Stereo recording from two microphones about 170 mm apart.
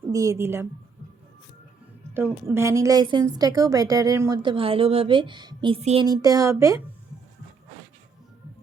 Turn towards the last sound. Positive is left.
turn(degrees=-15)  # may be behind; listen again after turning